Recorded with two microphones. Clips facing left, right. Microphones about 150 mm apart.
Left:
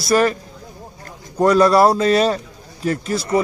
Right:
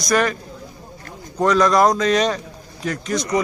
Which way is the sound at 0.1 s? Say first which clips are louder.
Left 3 dB; 35° left (ahead or behind).